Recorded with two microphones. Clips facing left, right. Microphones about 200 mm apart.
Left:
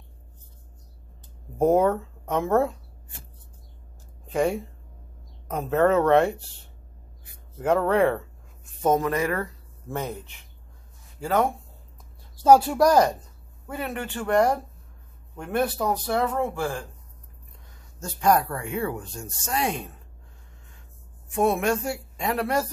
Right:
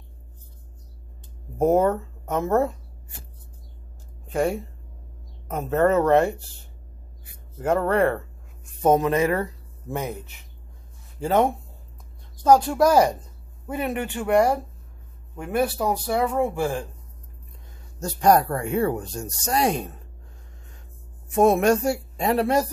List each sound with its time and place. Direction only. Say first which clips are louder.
1.6 s speech: right 1 dB; 5° right (ahead or behind)
4.3 s speech: even; 5° right (ahead or behind)
7.5 s speech: even; centre (ahead or behind)
8.8 s speech: right 3 dB; 20° right (ahead or behind)
9.8 s speech: right 2 dB; 5° right (ahead or behind)
11.1 s speech: right 3 dB; 25° right (ahead or behind)
12.4 s speech: even; 5° left (ahead or behind)
13.7 s speech: right 4 dB; 20° right (ahead or behind)
18.0 s speech: right 3 dB; 40° right (ahead or behind)
21.3 s speech: right 5 dB; 40° right (ahead or behind)